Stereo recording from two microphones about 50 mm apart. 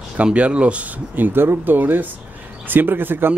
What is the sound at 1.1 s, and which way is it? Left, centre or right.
Speech, right.